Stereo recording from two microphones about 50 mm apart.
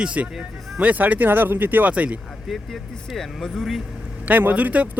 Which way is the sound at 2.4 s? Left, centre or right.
Centre.